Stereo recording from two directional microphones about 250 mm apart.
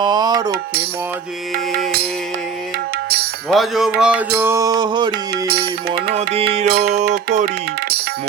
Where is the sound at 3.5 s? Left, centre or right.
Centre.